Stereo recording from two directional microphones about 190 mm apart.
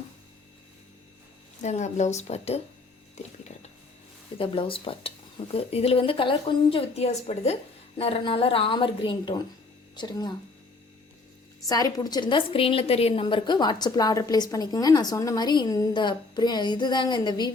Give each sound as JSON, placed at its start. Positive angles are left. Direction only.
{"t": 1.6, "sound": "a woman's voice", "side_deg": 40}
{"t": 3.2, "sound": "a sound", "side_deg": 35}
{"t": 4.4, "sound": "a woman's voice", "side_deg": 30}
{"t": 11.7, "sound": "a woman's voice", "side_deg": 20}